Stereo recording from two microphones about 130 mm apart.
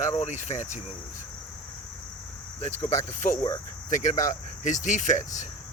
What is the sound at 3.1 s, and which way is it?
Speech, 65° left (ahead or behind).